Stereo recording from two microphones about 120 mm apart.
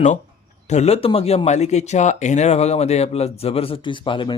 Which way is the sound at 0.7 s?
65° left (ahead or behind).